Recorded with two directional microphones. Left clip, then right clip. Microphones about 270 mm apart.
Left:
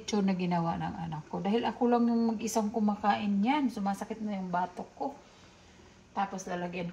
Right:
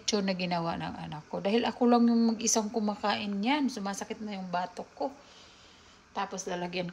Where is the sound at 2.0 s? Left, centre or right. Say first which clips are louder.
Right 3 dB; right.